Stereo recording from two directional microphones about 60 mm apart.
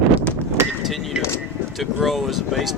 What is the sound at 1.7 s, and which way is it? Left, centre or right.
Speech, centre.